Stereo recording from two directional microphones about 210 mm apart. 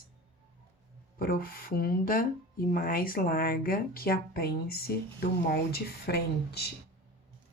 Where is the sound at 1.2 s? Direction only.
45° left (ahead or behind).